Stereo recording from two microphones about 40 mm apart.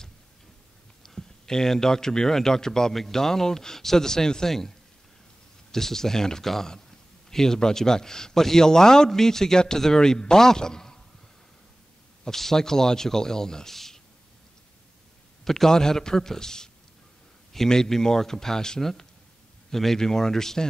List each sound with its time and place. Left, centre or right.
1.0 s a man's voice: centre
12.3 s a man's voice: centre
15.4 s a man's voice: centre